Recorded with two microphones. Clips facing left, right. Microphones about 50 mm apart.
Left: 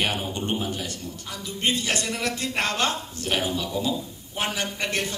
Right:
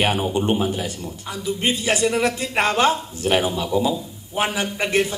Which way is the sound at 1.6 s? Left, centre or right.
Centre.